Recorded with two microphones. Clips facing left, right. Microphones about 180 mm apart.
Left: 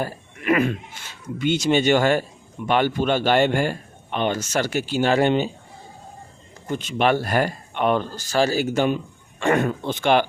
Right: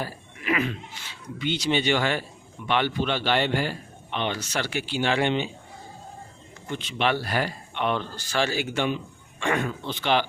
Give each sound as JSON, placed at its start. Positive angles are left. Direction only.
{"t": 0.0, "sound": "speech", "side_deg": 50}
{"t": 6.7, "sound": "speech", "side_deg": 45}